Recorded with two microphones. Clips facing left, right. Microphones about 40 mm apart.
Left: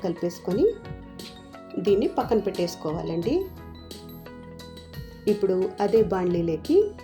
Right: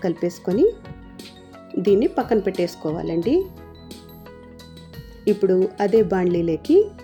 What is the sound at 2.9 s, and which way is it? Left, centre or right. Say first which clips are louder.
Speech: right 4 dB; centre.